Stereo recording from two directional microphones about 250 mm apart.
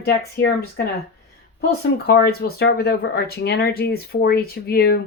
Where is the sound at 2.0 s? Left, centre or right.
Left.